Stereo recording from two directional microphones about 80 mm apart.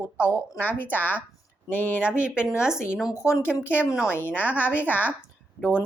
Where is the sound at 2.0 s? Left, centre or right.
Centre.